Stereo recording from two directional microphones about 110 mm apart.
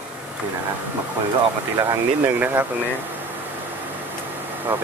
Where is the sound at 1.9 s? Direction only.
20° right (ahead or behind).